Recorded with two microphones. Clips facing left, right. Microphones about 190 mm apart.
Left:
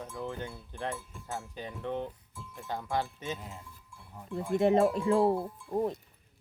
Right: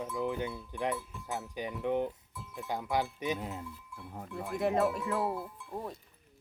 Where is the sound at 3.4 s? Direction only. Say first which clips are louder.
Right 6 dB; 65° right (ahead or behind).